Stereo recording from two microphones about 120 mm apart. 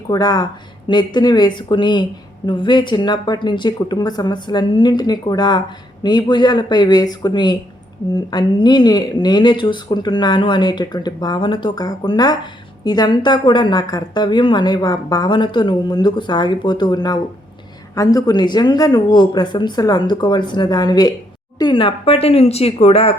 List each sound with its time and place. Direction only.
0.1 s speech: 35° left (ahead or behind); by 23.1 s 55° left (ahead or behind)